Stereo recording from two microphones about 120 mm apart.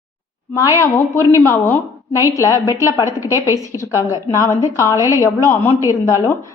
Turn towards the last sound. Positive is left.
turn(degrees=25)  # may be behind; listen again after turning